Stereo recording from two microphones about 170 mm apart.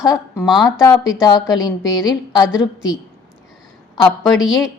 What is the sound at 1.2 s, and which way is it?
A woman's voice, 20° left (ahead or behind).